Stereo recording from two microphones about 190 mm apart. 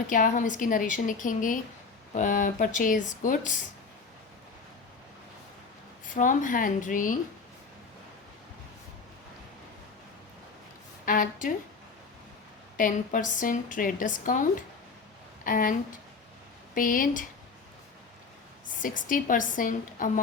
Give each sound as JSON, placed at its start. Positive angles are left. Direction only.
{"t": 0.1, "sound": "a woman's voice", "side_deg": 45}
{"t": 6.1, "sound": "a woman's voice", "side_deg": 45}
{"t": 11.0, "sound": "a woman's voice", "side_deg": 45}
{"t": 12.7, "sound": "a woman's voice", "side_deg": 45}
{"t": 15.4, "sound": "a woman's voice", "side_deg": 45}
{"t": 18.8, "sound": "a woman's voice", "side_deg": 45}